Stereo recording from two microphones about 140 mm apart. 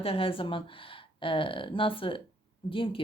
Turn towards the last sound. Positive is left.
turn(degrees=40)  # may be behind; listen again after turning